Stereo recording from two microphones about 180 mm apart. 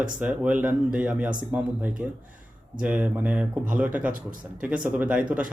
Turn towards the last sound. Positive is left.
turn(degrees=-5)  # may be behind; listen again after turning